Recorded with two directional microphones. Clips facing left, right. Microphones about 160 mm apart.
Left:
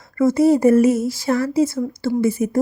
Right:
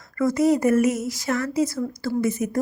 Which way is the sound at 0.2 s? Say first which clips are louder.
Left 5 dB; 25° left (ahead or behind).